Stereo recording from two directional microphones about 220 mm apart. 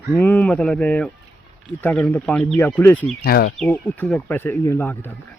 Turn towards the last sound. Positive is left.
turn(degrees=10)  # may be behind; listen again after turning